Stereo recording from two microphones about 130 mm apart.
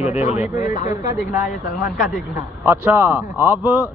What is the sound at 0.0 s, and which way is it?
Speech, 55° left (ahead or behind).